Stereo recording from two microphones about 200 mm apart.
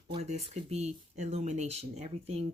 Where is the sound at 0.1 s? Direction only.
35° right (ahead or behind).